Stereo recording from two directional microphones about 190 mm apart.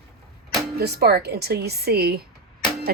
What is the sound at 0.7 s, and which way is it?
Speech, 55° right (ahead or behind).